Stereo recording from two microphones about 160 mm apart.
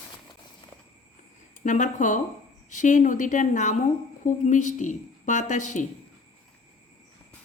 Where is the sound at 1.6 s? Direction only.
50° left (ahead or behind).